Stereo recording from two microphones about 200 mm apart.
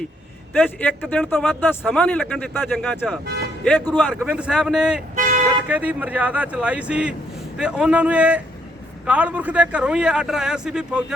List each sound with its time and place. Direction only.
0.5 s a man's voice: 10° left (ahead or behind)
4.1 s speech: 5° right (ahead or behind)
5.1 s vehicle: 40° right (ahead or behind)
5.6 s speech: 10° right (ahead or behind)